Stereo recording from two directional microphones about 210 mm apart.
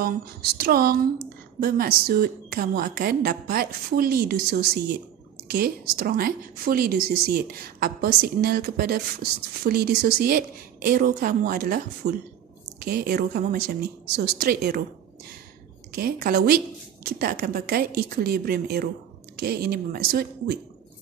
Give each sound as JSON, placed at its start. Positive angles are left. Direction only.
{"t": 0.0, "sound": "a woman's voice", "side_deg": -45}
{"t": 15.9, "sound": "a woman's voice", "side_deg": -45}